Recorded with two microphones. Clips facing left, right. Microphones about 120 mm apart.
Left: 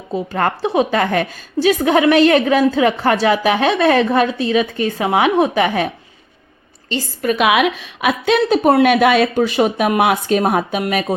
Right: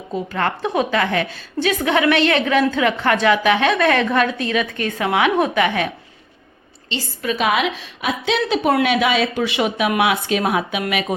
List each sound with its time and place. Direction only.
0.3 s a woman's voice: 35° left (ahead or behind)
6.9 s speech: 45° left (ahead or behind)
7.3 s a woman's voice: 65° left (ahead or behind)
9.3 s a woman's voice: 40° left (ahead or behind)